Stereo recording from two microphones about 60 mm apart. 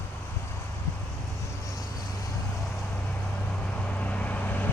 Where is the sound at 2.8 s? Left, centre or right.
Left.